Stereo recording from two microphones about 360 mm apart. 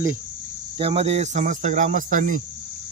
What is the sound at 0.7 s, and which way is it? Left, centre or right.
Speech, centre.